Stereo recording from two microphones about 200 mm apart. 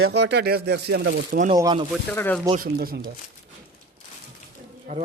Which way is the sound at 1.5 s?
20° right (ahead or behind).